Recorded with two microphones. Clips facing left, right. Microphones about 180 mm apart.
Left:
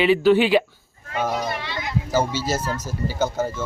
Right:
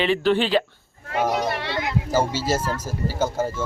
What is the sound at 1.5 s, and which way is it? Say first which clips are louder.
Speech: right 3 dB; 65° right (ahead or behind).